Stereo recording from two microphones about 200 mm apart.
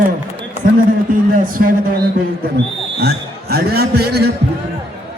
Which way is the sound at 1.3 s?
45° right (ahead or behind).